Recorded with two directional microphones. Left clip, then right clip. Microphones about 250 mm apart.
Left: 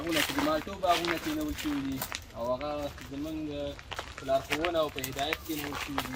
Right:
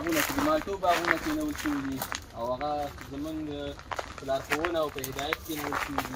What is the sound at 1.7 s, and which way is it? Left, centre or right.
Speech, centre.